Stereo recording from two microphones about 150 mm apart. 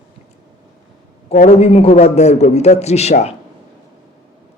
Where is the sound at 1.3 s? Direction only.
45° left (ahead or behind).